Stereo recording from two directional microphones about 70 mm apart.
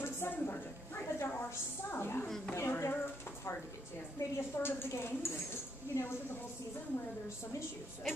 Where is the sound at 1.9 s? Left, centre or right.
Left.